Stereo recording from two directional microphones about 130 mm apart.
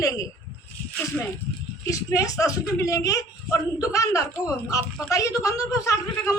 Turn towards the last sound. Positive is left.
turn(degrees=25)  # may be behind; listen again after turning